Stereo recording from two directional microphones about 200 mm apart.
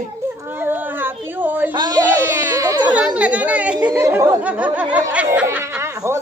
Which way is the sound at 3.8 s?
10° right (ahead or behind).